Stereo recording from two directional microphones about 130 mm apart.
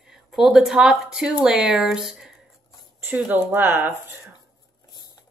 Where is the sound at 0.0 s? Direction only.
5° right (ahead or behind).